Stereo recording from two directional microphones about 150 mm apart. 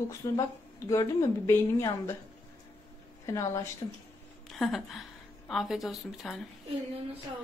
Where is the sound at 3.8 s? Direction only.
30° left (ahead or behind).